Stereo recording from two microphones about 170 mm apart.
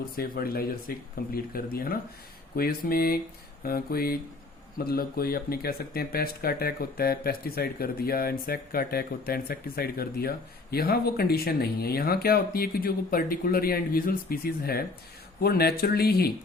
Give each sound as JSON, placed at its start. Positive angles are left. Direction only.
{"t": 0.2, "sound": "speech", "side_deg": 60}